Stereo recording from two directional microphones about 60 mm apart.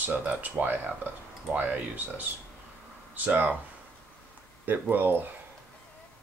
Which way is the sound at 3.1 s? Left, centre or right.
Right.